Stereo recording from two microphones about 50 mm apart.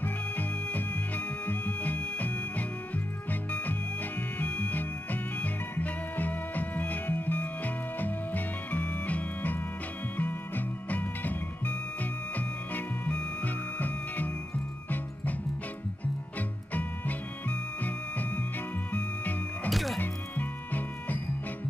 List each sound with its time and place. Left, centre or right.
0.0 s music: left
16.3 s music: left
19.7 s music: centre
20.0 s music: left